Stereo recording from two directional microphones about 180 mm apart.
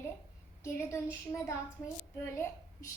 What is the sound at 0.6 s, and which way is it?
Speech, 15° left (ahead or behind).